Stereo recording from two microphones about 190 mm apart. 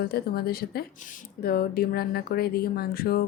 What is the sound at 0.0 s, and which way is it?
A woman's voice, 55° left (ahead or behind).